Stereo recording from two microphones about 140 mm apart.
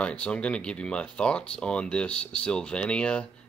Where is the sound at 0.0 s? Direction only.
10° left (ahead or behind).